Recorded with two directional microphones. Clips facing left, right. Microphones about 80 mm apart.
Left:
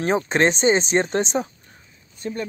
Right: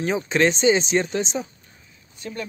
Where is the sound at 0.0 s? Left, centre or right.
Left.